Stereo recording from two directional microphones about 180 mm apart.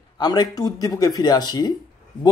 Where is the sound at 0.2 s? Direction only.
25° left (ahead or behind).